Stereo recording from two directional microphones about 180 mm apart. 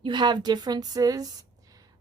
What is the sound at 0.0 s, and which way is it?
A woman's voice, 25° right (ahead or behind).